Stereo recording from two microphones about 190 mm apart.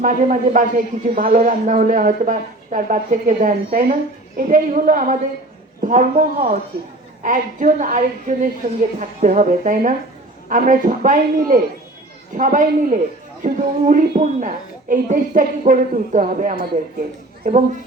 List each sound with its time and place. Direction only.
0.0 s a woman's voice: 45° right (ahead or behind)